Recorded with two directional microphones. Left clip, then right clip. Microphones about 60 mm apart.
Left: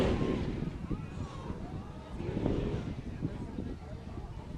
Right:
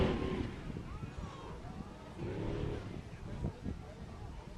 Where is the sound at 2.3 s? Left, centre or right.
Left.